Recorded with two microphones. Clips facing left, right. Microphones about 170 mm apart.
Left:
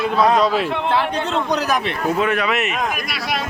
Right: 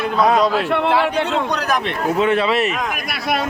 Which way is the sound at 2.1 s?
25° right (ahead or behind).